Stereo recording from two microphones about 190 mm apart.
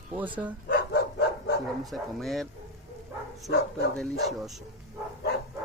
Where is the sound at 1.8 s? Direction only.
Centre (ahead or behind).